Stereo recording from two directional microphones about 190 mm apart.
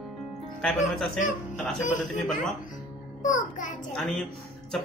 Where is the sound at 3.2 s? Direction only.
40° left (ahead or behind).